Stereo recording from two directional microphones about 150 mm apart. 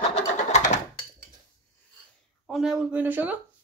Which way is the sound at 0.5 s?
50° left (ahead or behind).